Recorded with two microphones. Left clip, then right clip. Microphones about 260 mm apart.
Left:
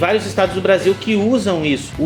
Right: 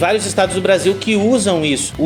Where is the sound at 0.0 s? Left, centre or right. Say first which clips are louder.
Right 1 dB; right.